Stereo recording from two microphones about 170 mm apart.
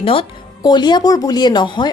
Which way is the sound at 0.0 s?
30° left (ahead or behind).